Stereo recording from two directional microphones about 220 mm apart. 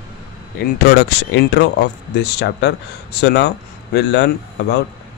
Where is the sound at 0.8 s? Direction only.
50° left (ahead or behind).